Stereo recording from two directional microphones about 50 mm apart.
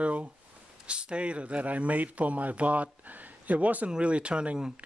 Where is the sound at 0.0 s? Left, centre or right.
Right.